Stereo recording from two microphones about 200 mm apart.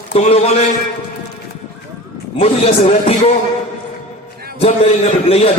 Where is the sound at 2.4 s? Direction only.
30° left (ahead or behind).